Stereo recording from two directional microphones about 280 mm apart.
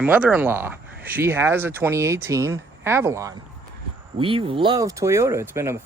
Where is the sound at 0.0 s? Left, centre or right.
Centre.